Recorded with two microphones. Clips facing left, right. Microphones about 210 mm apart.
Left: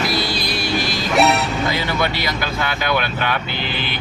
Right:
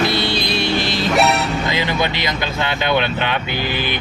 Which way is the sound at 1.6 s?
20° right (ahead or behind).